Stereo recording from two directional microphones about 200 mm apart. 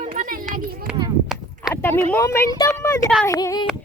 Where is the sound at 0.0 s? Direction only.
30° right (ahead or behind).